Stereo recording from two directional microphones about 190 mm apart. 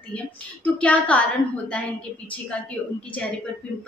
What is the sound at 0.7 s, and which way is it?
Speech, 5° left (ahead or behind).